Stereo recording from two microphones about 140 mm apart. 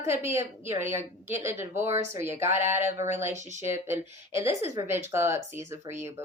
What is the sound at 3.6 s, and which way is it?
A woman's voice, 15° right (ahead or behind).